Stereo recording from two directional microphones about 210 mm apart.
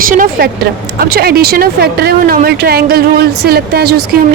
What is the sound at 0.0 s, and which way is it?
Speech, 40° right (ahead or behind).